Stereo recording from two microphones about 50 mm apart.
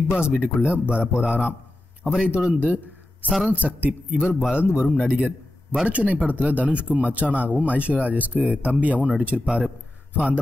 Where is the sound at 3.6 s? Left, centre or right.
Right.